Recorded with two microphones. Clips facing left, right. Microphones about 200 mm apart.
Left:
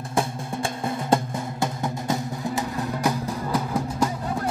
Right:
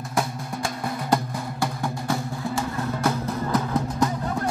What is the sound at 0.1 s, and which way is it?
Music, 25° left (ahead or behind).